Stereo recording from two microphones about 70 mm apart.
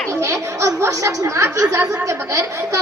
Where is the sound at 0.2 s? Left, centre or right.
Right.